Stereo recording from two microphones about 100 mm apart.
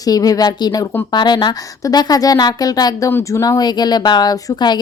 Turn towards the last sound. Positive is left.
turn(degrees=45)  # may be behind; listen again after turning